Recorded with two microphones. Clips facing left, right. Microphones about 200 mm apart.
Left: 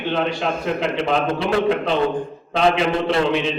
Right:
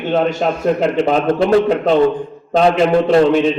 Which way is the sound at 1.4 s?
45° right (ahead or behind).